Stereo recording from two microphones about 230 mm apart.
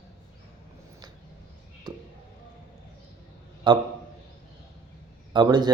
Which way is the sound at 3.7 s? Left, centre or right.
Centre.